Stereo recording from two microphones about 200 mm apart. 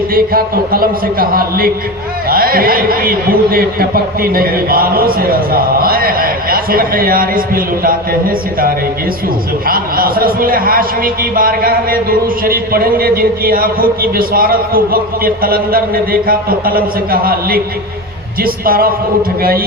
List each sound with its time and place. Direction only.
0.1 s a man's voice: 50° right (ahead or behind)
9.6 s a man's voice: 45° right (ahead or behind)